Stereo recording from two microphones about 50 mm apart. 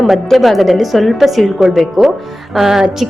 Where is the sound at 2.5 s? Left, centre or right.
Centre.